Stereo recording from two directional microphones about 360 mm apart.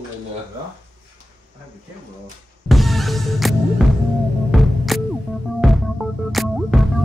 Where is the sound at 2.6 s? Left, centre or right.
Centre.